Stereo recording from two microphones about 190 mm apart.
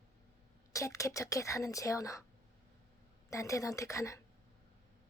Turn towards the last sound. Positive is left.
turn(degrees=15)  # may be behind; listen again after turning